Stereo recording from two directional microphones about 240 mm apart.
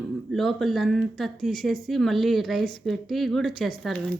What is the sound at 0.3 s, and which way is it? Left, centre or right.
Speech, centre.